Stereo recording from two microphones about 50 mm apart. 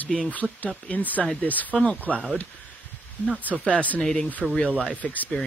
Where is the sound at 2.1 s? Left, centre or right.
Centre.